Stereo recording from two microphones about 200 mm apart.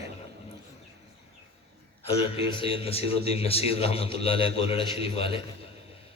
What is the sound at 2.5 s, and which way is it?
A man's voice, 25° left (ahead or behind).